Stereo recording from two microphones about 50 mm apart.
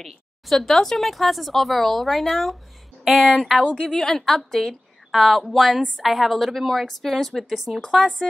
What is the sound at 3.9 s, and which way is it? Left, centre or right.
A woman's voice, centre.